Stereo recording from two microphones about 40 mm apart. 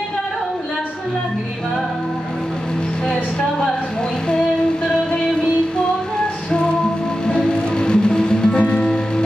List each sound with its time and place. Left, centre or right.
7.2 s music: left
8.5 s music: left